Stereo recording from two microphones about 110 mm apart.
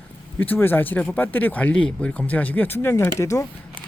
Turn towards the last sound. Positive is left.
turn(degrees=30)  # may be behind; listen again after turning